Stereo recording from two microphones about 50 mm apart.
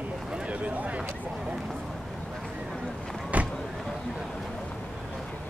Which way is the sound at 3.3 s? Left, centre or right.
Right.